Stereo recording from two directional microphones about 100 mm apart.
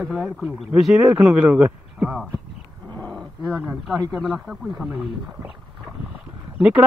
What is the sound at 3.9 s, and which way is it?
Speech, 35° right (ahead or behind).